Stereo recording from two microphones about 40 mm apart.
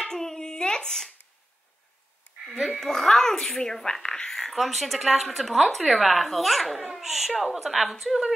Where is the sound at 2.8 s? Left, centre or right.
Centre.